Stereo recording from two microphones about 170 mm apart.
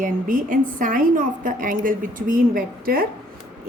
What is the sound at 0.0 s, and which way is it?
A woman's voice, 50° right (ahead or behind).